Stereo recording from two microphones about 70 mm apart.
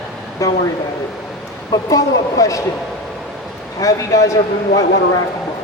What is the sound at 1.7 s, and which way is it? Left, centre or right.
Speech, left.